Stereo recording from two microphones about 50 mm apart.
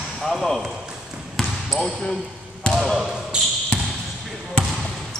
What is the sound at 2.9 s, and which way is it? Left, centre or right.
Basketball bounce, centre.